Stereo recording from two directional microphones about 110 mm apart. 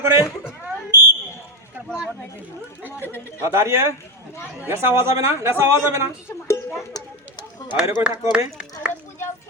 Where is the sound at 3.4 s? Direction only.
25° right (ahead or behind).